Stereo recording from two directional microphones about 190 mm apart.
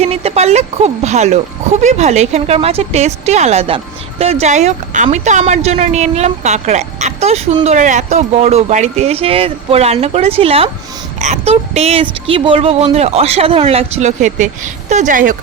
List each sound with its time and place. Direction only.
0.0 s speech: 35° right (ahead or behind)